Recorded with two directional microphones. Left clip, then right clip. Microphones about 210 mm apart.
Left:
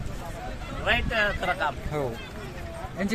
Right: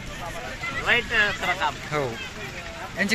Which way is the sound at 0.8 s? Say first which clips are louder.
Right 3 dB; 50° left (ahead or behind).